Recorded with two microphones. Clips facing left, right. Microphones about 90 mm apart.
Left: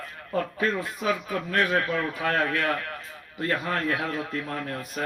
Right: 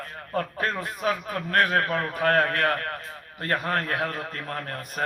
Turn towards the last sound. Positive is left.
turn(degrees=-50)  # may be behind; listen again after turning